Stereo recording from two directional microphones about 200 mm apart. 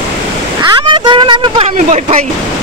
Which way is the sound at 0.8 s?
25° right (ahead or behind).